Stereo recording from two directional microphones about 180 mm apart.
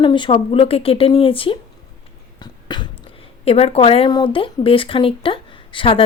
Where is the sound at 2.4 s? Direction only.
25° left (ahead or behind).